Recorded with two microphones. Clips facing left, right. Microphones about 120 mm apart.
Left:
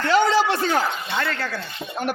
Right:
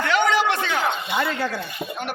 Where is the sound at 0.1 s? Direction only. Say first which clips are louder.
Left 3 dB; 35° left (ahead or behind).